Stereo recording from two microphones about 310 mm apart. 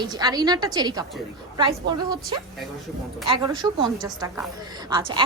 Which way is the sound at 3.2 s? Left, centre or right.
Centre.